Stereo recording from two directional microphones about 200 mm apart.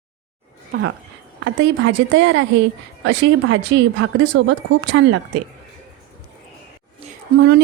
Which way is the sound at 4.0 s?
75° right (ahead or behind).